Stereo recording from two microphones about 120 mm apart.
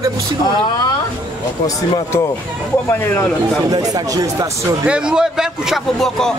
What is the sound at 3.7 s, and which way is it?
Speech, 30° right (ahead or behind).